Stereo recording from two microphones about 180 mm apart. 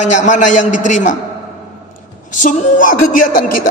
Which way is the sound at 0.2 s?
45° left (ahead or behind).